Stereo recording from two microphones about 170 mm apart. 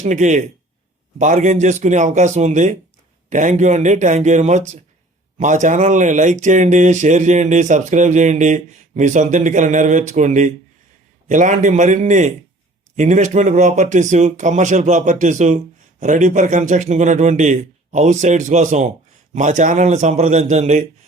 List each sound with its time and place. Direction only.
0.0 s speech: 45° right (ahead or behind)